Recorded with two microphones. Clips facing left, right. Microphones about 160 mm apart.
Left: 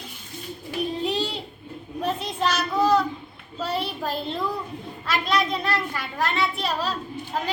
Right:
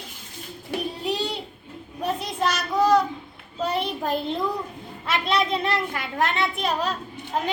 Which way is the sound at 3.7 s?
20° right (ahead or behind).